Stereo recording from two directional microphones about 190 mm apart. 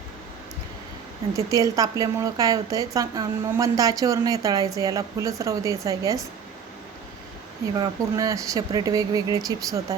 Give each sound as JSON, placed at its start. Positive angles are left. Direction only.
{"t": 1.3, "sound": "a woman's voice", "side_deg": -15}
{"t": 7.8, "sound": "speech", "side_deg": -20}